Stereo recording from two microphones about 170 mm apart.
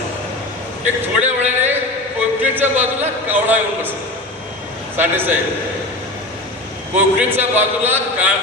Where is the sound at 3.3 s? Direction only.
10° right (ahead or behind).